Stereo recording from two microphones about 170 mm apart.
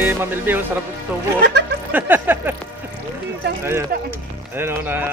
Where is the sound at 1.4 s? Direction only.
90° right.